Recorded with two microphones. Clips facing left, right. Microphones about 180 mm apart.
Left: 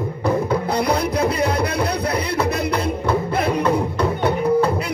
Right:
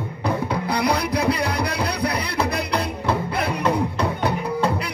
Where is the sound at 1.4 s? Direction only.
25° left (ahead or behind).